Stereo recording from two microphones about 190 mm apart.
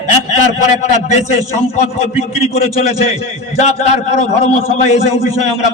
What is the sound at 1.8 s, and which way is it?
A man's voice, 35° left (ahead or behind).